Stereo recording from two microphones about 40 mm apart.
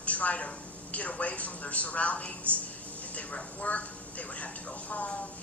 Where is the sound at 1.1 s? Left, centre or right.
Left.